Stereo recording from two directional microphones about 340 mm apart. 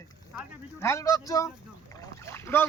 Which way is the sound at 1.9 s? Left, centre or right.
Centre.